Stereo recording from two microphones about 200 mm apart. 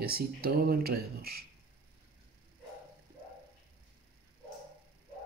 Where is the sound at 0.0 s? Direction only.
50° right (ahead or behind).